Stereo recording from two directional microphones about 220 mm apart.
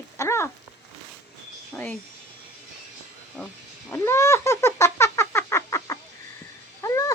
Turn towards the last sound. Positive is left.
turn(degrees=15)  # may be behind; listen again after turning